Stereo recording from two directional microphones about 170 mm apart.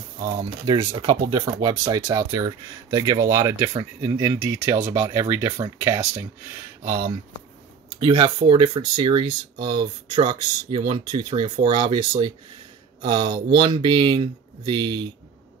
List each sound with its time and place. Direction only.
0.4 s speech: 30° right (ahead or behind); by 5.9 s 15° right (ahead or behind)
6.8 s speech: 30° right (ahead or behind)